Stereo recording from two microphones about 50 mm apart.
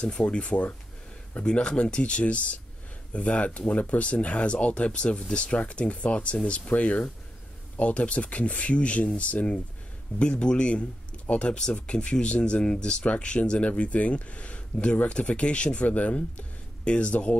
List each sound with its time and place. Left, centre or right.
0.0 s speech: left